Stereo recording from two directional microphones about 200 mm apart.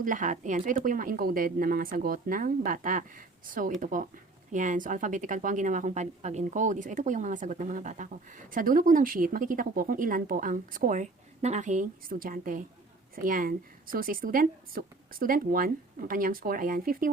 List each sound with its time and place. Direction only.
0.0 s a woman's voice: 40° right (ahead or behind)